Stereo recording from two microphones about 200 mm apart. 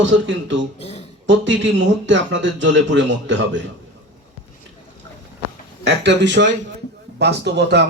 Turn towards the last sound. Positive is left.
turn(degrees=-55)  # may be behind; listen again after turning